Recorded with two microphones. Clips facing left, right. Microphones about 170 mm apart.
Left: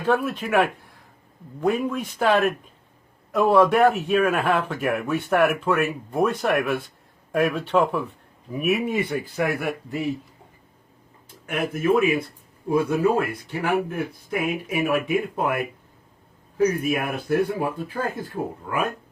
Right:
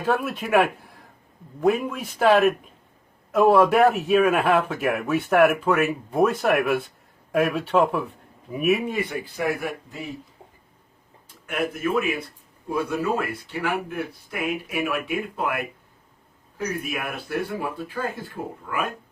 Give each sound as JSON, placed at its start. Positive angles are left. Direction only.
{"t": 0.0, "sound": "a man's voice", "side_deg": -5}
{"t": 9.1, "sound": "speech", "side_deg": 60}
{"t": 11.4, "sound": "speech", "side_deg": 55}